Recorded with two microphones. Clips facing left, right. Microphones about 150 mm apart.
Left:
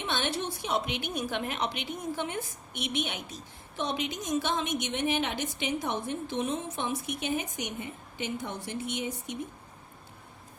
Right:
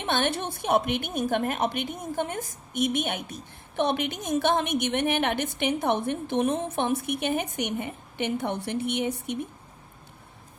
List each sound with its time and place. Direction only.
0.0 s a woman's voice: 55° right (ahead or behind)